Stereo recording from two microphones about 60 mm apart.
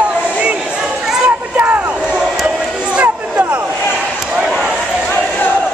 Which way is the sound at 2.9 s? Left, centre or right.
Right.